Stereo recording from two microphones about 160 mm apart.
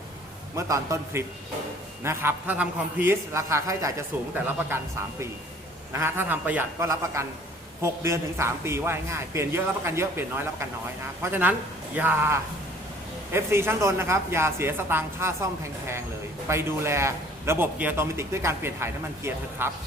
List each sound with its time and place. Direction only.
0.5 s a man's voice: 20° right (ahead or behind)
5.9 s a man's voice: 15° right (ahead or behind)
16.5 s a man's voice: 15° right (ahead or behind)